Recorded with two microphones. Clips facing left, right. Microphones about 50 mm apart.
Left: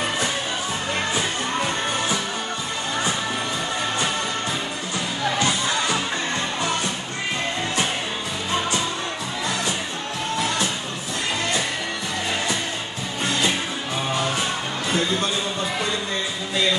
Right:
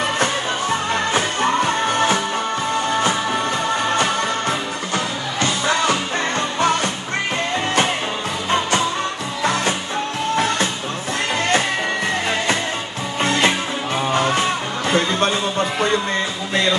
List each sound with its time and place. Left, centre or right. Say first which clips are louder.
0.2 s music: right 5 dB; right
3.9 s music: right 5 dB; right
9.4 s music: right 7 dB; right
13.2 s music: right 5 dB; right